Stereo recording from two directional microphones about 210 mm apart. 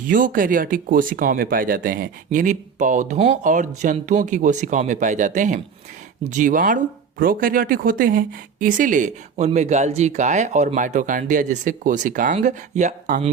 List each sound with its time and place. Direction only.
0.1 s speech: 40° right (ahead or behind)